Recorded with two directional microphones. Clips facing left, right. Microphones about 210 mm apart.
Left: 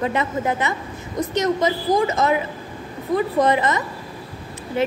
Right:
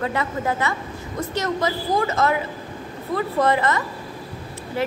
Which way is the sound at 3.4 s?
20° left (ahead or behind).